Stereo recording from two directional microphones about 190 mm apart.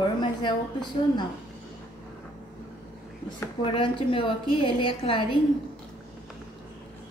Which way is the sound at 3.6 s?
25° left (ahead or behind).